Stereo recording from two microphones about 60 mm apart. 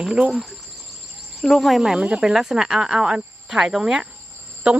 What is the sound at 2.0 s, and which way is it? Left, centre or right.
Speech, centre.